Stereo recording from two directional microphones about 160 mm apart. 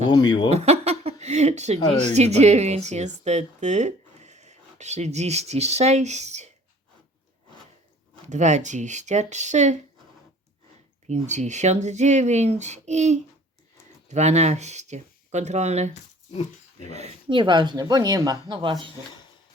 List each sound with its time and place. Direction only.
0.1 s speech: 30° left (ahead or behind)
0.5 s a woman's voice: 40° right (ahead or behind)
8.3 s speech: 45° right (ahead or behind)
11.1 s speech: 50° right (ahead or behind)
16.9 s speech: 35° right (ahead or behind)